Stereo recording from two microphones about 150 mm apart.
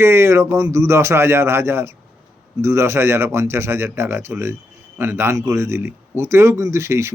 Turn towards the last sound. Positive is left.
turn(degrees=-20)  # may be behind; listen again after turning